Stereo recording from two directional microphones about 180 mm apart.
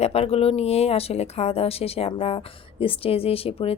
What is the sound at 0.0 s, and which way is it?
Speech, 35° left (ahead or behind).